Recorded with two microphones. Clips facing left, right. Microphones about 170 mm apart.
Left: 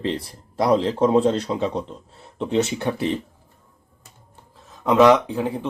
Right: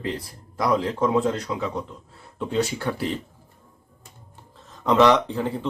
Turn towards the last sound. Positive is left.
turn(degrees=10)  # may be behind; listen again after turning